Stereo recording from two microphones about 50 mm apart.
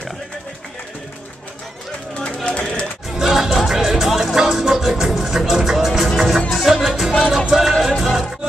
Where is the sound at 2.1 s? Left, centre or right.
Left.